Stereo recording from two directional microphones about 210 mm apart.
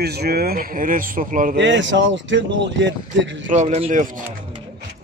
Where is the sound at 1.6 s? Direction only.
60° right (ahead or behind).